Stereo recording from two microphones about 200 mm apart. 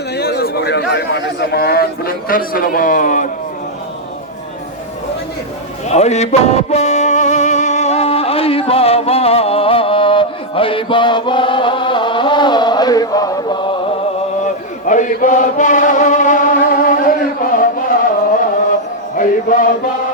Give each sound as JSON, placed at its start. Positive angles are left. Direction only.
{"t": 0.2, "sound": "a man's voice", "side_deg": 50}
{"t": 5.9, "sound": "music", "side_deg": 35}
{"t": 14.4, "sound": "chant", "side_deg": 40}
{"t": 19.1, "sound": "a sound", "side_deg": 40}